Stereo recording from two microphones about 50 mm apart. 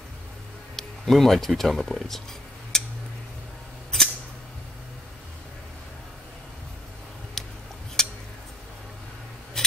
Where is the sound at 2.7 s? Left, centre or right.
Centre.